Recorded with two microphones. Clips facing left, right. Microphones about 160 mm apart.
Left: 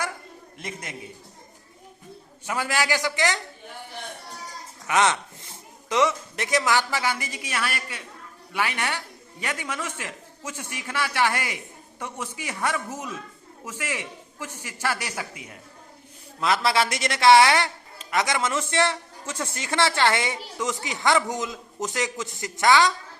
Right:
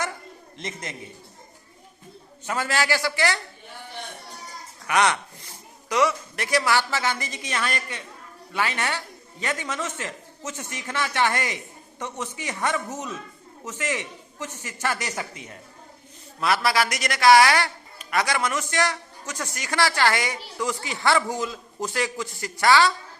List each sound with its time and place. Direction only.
0.6 s a man's voice: 10° left (ahead or behind)
2.5 s a man's voice: 15° left (ahead or behind)
4.9 s a man's voice: 20° left (ahead or behind)
16.4 s a man's voice: 20° left (ahead or behind)